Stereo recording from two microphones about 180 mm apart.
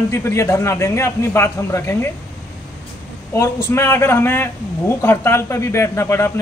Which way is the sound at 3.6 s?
15° left (ahead or behind).